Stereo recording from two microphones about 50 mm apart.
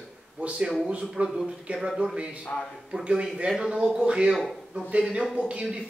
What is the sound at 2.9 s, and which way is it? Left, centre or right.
Speech, centre.